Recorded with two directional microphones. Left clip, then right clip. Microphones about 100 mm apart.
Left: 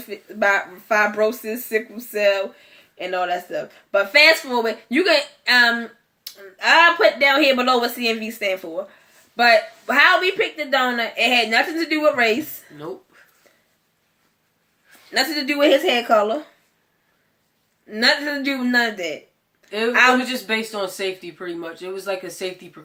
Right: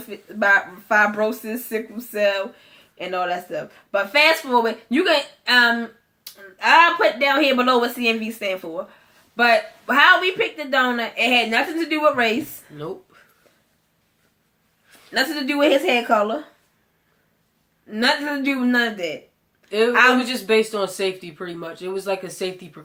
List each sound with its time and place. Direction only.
0.1 s speech: 30° left (ahead or behind)
15.1 s speech: 35° left (ahead or behind)
17.8 s speech: 35° left (ahead or behind)
20.2 s speech: 40° right (ahead or behind)